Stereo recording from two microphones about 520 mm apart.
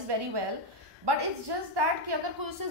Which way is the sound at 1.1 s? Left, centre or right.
Right.